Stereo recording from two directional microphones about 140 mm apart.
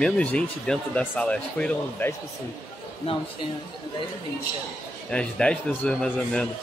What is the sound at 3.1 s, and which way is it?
Speech, 40° left (ahead or behind).